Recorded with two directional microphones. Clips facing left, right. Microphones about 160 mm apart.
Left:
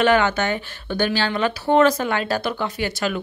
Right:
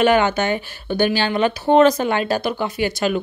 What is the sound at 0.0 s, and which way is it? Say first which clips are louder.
Speech: right 2 dB; 15° right (ahead or behind).